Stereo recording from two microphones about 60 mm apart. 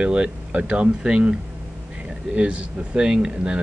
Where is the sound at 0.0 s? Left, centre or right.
Centre.